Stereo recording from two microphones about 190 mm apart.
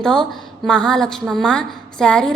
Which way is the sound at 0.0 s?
5° left (ahead or behind).